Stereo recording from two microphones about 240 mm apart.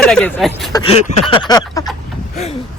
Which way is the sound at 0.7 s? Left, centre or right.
Left.